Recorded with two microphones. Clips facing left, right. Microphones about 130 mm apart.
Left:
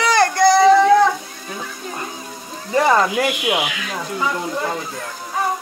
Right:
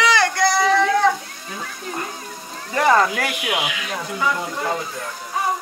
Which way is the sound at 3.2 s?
25° left (ahead or behind).